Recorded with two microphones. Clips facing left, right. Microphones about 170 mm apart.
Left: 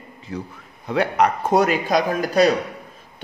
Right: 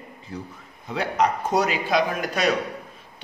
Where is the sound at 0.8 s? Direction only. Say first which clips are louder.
Left 4 dB; 60° left (ahead or behind); by 2.5 s 35° left (ahead or behind).